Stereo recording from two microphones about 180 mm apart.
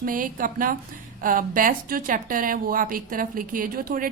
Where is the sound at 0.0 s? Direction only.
50° right (ahead or behind).